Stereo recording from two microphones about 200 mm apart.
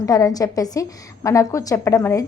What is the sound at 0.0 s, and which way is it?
A woman's voice, 15° left (ahead or behind).